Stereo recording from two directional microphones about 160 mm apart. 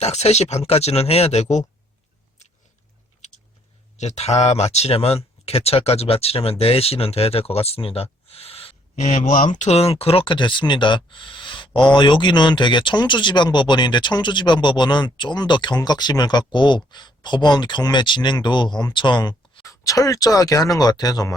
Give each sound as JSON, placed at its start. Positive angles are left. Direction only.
{"t": 0.0, "sound": "speech", "side_deg": 40}
{"t": 3.2, "sound": "a sound", "side_deg": 50}
{"t": 3.9, "sound": "speech", "side_deg": 45}